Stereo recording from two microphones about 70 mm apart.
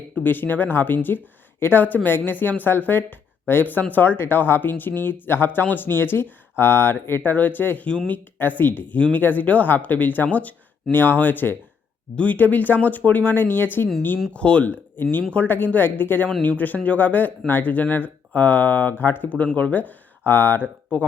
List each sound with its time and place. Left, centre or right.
0.2 s speech: left
7.9 s speech: centre
8.1 s speech: left
14.3 s speech: centre